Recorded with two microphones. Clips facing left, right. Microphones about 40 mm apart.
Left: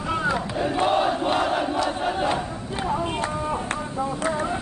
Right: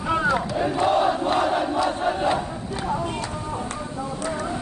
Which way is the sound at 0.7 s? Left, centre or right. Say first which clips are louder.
Right 1 dB; left.